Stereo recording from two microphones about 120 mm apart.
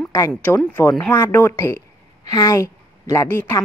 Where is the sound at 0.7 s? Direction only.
20° left (ahead or behind).